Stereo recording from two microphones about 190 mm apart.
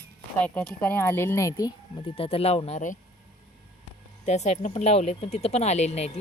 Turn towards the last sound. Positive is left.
turn(degrees=35)  # may be behind; listen again after turning